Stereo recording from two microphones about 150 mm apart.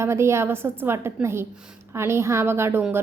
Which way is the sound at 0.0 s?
20° right (ahead or behind).